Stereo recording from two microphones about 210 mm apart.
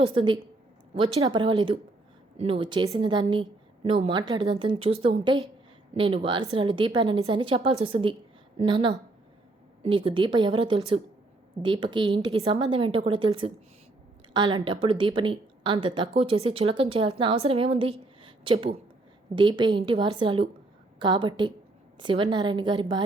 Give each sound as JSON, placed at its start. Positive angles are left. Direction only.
{"t": 0.0, "sound": "a woman's voice", "side_deg": -25}
{"t": 18.2, "sound": "a sound", "side_deg": -25}
{"t": 19.4, "sound": "a woman's voice", "side_deg": -20}